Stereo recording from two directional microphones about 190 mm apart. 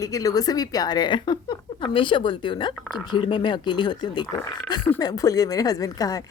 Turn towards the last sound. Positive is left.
turn(degrees=20)  # may be behind; listen again after turning